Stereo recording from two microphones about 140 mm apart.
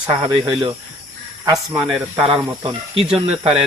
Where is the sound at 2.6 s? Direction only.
40° right (ahead or behind).